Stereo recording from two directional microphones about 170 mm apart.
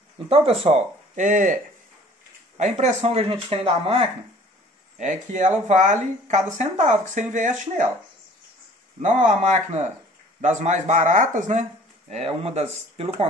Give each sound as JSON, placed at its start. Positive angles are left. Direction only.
{"t": 0.3, "sound": "speech", "side_deg": -35}
{"t": 4.9, "sound": "speech", "side_deg": -45}
{"t": 9.0, "sound": "speech", "side_deg": -45}